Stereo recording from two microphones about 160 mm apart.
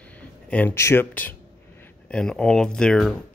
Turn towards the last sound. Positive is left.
turn(degrees=5)  # may be behind; listen again after turning